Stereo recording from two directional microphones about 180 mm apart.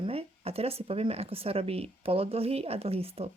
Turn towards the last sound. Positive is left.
turn(degrees=-35)  # may be behind; listen again after turning